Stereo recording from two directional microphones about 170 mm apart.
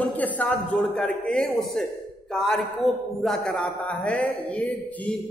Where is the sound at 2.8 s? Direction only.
40° left (ahead or behind).